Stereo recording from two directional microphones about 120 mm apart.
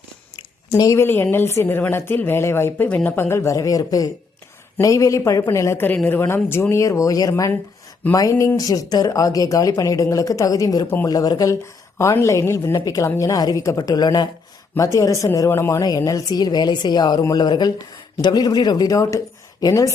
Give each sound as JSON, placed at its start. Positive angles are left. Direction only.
{"t": 0.8, "sound": "a woman's voice", "side_deg": 25}
{"t": 10.8, "sound": "speech", "side_deg": 15}
{"t": 11.1, "sound": "a woman's voice", "side_deg": 30}